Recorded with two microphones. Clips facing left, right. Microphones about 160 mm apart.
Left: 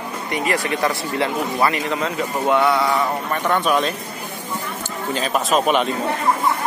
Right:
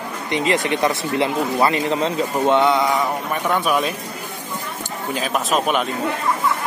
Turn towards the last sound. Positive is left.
turn(degrees=0)  # may be behind; listen again after turning